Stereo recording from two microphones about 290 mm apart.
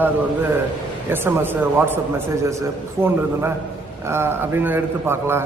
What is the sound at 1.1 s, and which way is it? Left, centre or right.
A man's voice, centre.